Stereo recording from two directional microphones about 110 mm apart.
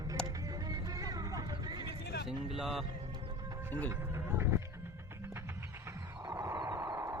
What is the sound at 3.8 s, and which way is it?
Music, 25° right (ahead or behind).